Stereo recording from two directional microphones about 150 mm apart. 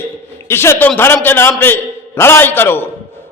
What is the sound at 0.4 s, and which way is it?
A man's voice, 15° left (ahead or behind).